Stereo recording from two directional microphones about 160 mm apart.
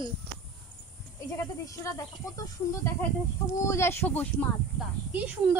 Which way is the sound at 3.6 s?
15° left (ahead or behind).